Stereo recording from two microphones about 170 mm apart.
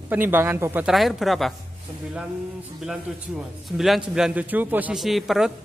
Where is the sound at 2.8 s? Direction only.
5° right (ahead or behind).